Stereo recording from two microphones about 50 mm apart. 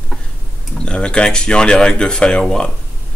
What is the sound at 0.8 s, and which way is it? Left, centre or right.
Speech, centre.